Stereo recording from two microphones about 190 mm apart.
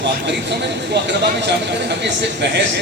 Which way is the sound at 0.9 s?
65° right (ahead or behind).